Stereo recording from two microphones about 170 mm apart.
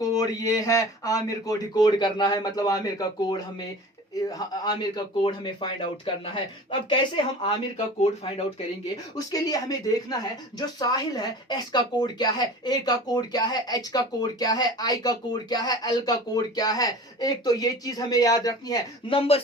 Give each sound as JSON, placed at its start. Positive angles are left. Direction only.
{"t": 0.0, "sound": "speech", "side_deg": 20}
{"t": 8.0, "sound": "speech", "side_deg": 40}
{"t": 9.1, "sound": "speech", "side_deg": 20}